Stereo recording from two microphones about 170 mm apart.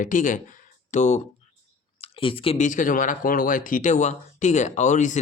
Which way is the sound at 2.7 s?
50° left (ahead or behind).